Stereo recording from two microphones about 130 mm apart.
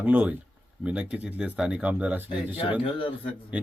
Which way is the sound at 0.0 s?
10° right (ahead or behind).